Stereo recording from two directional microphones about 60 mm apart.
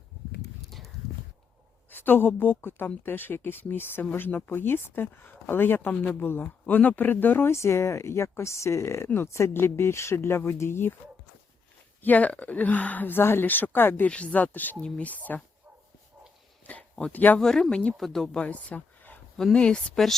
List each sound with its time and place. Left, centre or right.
1.9 s speech: left
7.5 s speech: left
12.0 s speech: left
14.1 s speech: left
14.8 s speech: centre
15.0 s speech: left
17.1 s speech: left
17.4 s speech: centre
17.9 s speech: centre